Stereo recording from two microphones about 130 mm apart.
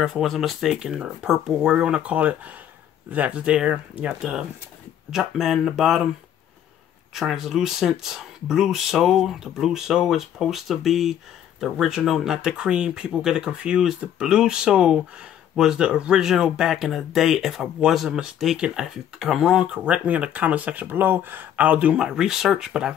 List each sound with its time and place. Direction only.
0.0 s speech: centre (ahead or behind)
7.2 s speech: centre (ahead or behind)